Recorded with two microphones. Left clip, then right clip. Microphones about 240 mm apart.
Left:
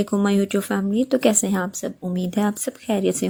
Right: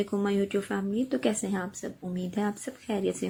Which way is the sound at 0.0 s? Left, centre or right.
Left.